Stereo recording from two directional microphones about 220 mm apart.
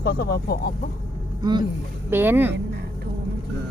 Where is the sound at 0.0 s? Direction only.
45° left (ahead or behind).